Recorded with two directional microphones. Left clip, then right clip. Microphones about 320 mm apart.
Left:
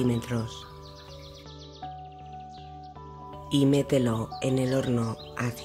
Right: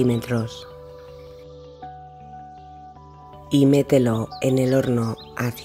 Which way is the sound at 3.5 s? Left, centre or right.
Centre.